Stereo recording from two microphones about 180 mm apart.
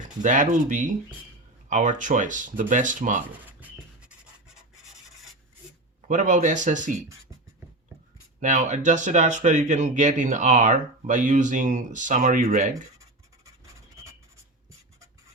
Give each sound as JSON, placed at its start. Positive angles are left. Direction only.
{"t": 0.2, "sound": "speech", "side_deg": -45}
{"t": 6.1, "sound": "speech", "side_deg": -45}
{"t": 8.4, "sound": "speech", "side_deg": -45}
{"t": 12.7, "sound": "scratch", "side_deg": -20}